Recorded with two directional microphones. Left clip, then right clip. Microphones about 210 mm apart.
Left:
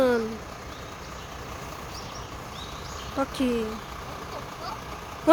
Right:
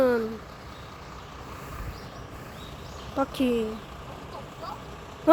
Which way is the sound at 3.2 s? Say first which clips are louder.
Right 1 dB; 5° right (ahead or behind).